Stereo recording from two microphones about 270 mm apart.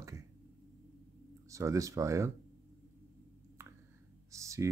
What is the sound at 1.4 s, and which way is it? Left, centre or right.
Speech, centre.